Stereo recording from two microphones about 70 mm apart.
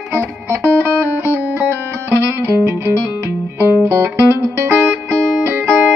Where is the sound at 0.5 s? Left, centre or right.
Right.